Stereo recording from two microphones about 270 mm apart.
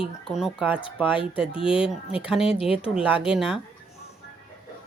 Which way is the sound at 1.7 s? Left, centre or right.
Centre.